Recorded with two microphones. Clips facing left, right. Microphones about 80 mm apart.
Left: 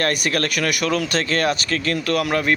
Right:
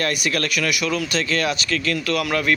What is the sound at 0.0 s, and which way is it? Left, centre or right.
A man's voice, left.